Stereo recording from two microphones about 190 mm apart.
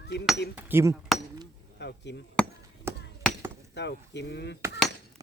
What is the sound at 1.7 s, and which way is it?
Chop, 65° left (ahead or behind).